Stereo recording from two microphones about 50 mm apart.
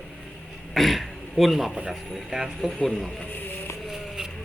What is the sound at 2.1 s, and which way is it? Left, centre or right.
Speech, centre.